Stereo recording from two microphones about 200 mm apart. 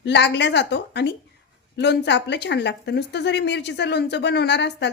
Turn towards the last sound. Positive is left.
turn(degrees=60)  # may be behind; listen again after turning